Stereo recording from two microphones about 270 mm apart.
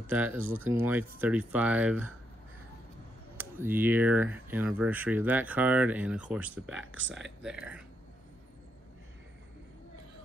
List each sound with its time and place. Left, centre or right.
0.1 s speech: centre
3.3 s speech: centre
6.8 s speech: right
7.4 s speech: centre